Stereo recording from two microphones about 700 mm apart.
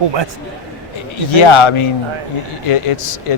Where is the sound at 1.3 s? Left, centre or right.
Left.